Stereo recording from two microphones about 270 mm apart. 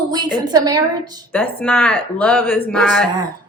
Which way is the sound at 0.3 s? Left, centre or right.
Centre.